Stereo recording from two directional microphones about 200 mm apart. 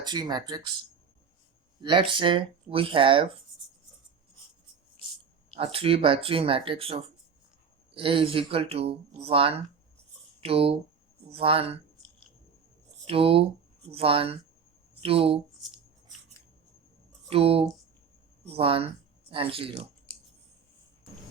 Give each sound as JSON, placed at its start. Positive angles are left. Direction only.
{"t": 0.0, "sound": "speech", "side_deg": -20}
{"t": 1.8, "sound": "speech", "side_deg": -25}
{"t": 5.5, "sound": "speech", "side_deg": -30}
{"t": 13.1, "sound": "speech", "side_deg": -30}
{"t": 17.2, "sound": "speech", "side_deg": -30}